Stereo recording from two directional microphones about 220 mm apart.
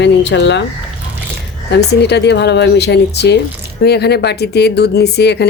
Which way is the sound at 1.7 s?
50° left (ahead or behind).